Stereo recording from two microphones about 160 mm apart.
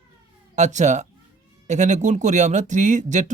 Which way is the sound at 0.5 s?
50° right (ahead or behind).